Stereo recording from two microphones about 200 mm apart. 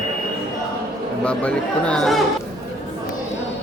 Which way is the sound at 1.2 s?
5° left (ahead or behind).